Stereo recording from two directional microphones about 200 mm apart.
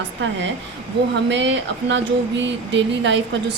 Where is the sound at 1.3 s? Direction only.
60° right (ahead or behind).